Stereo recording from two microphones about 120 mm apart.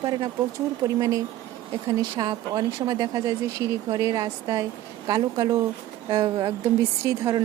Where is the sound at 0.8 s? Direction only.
25° right (ahead or behind).